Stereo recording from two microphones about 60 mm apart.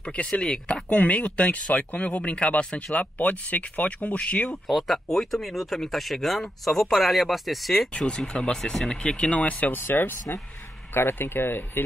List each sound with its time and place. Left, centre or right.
0.3 s speech: centre
4.6 s speech: centre; by 11.8 s left